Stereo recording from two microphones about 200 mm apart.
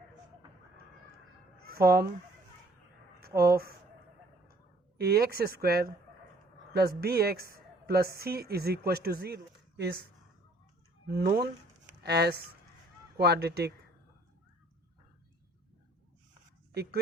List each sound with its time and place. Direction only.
1.6 s a sound: 50° right (ahead or behind)
3.2 s speech: 50° right (ahead or behind)
4.9 s a woman's voice: 50° right (ahead or behind)
11.1 s a woman's voice: 45° right (ahead or behind)